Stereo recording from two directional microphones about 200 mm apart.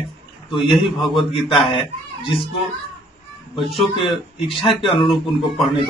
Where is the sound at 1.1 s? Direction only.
25° left (ahead or behind).